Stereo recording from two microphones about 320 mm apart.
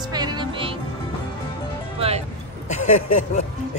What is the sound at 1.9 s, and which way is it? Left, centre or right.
Speech, centre.